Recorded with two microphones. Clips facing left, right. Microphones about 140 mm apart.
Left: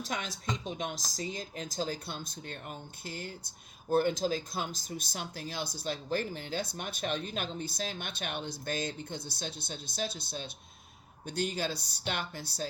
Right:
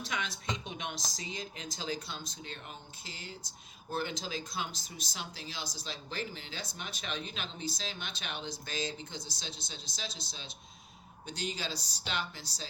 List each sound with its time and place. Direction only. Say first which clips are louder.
0.0 s speech: left 1 dB; 45° left (ahead or behind)